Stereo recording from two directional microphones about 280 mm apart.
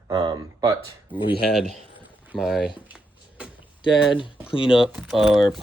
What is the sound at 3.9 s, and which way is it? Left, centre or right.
Speech, centre.